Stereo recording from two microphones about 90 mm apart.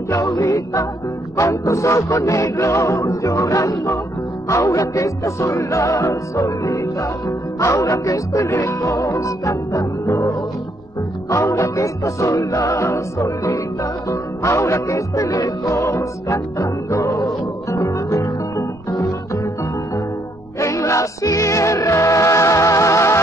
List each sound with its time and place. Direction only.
0.1 s music: 35° left (ahead or behind)
20.5 s music: 35° left (ahead or behind)